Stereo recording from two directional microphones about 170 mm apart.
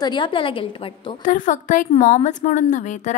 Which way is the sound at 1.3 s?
50° left (ahead or behind).